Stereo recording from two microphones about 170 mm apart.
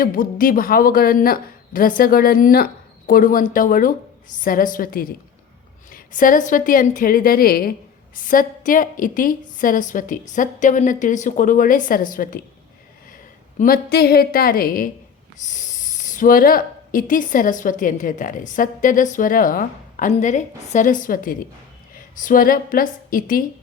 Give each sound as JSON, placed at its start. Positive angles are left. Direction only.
{"t": 0.0, "sound": "speech", "side_deg": 55}
{"t": 13.6, "sound": "a woman's voice", "side_deg": 65}